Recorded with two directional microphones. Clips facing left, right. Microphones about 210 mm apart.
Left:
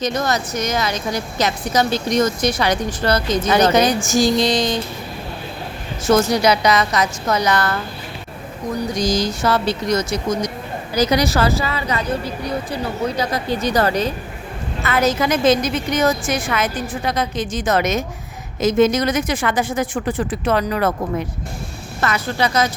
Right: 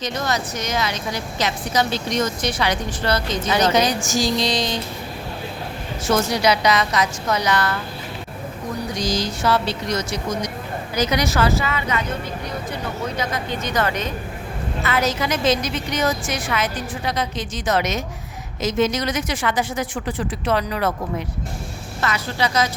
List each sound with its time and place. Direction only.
0.0 s a woman's voice: 45° left (ahead or behind)
6.1 s a woman's voice: 45° left (ahead or behind)
9.0 s a woman's voice: 45° left (ahead or behind)
13.1 s a woman's voice: 35° left (ahead or behind)
14.8 s a woman's voice: 50° left (ahead or behind)
22.0 s a woman's voice: 50° left (ahead or behind)